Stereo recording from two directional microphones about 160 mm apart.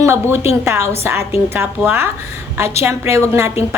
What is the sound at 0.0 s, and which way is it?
Speech, 15° right (ahead or behind).